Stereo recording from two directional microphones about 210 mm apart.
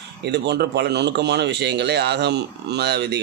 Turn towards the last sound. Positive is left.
turn(degrees=-55)  # may be behind; listen again after turning